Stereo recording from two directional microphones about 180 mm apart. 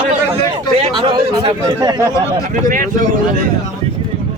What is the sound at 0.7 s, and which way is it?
Speech, 30° right (ahead or behind).